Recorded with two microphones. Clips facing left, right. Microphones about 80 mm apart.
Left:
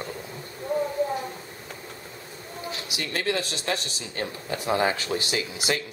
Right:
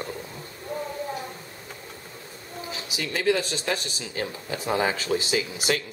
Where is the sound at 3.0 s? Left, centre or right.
Centre.